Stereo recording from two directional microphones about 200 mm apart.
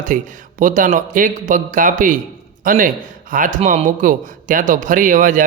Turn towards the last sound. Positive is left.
turn(degrees=-40)  # may be behind; listen again after turning